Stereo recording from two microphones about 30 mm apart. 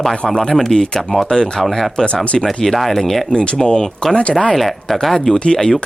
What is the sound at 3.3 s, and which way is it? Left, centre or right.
Speech, left.